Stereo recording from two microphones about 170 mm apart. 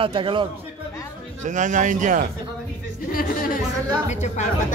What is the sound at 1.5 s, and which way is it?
Speech, 45° right (ahead or behind).